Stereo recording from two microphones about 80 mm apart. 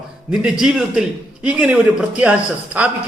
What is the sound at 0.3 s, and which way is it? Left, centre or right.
A man's voice, centre.